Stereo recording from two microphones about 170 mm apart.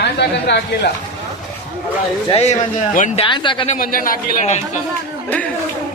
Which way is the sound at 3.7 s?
55° left (ahead or behind).